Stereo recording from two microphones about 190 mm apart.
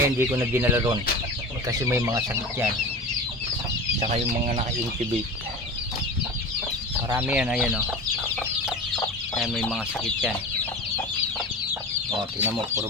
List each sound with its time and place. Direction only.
0.0 s speech: 15° right (ahead or behind)
4.1 s speech: 35° right (ahead or behind)
7.2 s speech: 10° right (ahead or behind)
9.3 s speech: 5° left (ahead or behind)
12.4 s speech: 10° right (ahead or behind)